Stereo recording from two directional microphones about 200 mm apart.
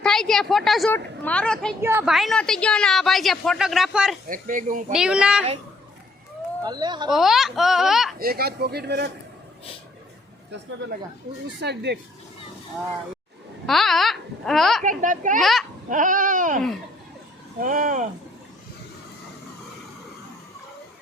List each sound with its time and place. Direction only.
0.0 s a woman's voice: centre (ahead or behind)
1.8 s a woman's voice: 10° right (ahead or behind)
4.3 s a child's voice: 40° right (ahead or behind)
4.9 s a woman's voice: 5° right (ahead or behind)
6.6 s speech: 20° right (ahead or behind)
7.1 s a woman's voice: centre (ahead or behind)
8.2 s speech: 50° right (ahead or behind)
11.6 s speech: 55° right (ahead or behind)
13.7 s a woman's voice: centre (ahead or behind)
14.8 s a child's voice: 40° right (ahead or behind)
15.4 s a woman's voice: centre (ahead or behind)
15.9 s a child's voice: 40° right (ahead or behind)